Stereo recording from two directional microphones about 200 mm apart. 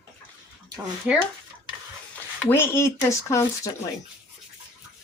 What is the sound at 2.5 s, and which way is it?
Speech, 10° left (ahead or behind).